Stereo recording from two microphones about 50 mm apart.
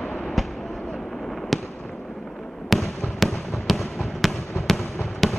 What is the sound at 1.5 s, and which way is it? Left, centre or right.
Fireworks, centre.